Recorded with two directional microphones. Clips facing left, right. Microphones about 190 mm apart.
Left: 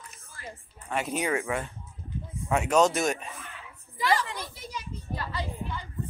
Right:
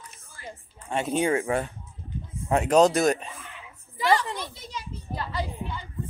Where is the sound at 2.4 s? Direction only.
35° right (ahead or behind).